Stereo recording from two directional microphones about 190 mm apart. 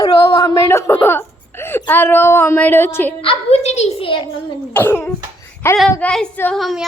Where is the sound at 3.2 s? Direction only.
30° left (ahead or behind).